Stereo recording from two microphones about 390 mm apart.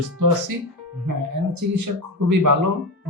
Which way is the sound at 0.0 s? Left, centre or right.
Right.